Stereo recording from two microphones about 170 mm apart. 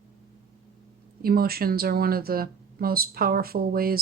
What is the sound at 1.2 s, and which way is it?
Speech, 60° right (ahead or behind).